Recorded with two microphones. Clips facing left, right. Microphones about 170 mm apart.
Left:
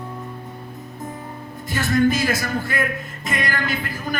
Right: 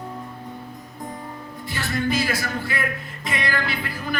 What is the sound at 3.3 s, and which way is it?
Speech, 45° left (ahead or behind).